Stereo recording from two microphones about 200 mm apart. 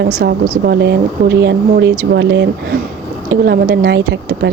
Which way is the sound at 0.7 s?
55° right (ahead or behind).